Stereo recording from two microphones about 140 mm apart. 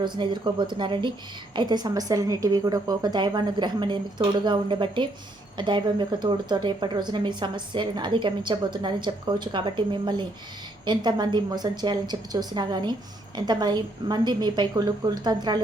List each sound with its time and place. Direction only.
0.0 s a woman's voice: 35° right (ahead or behind)